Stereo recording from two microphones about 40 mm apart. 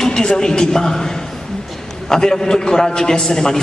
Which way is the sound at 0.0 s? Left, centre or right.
Centre.